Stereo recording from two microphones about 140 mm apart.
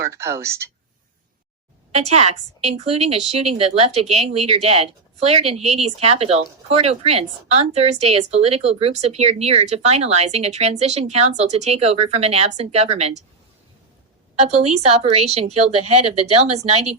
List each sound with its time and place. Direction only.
0.0 s a woman's voice: 20° right (ahead or behind)
1.9 s speech: 50° right (ahead or behind)
14.4 s speech: 50° right (ahead or behind)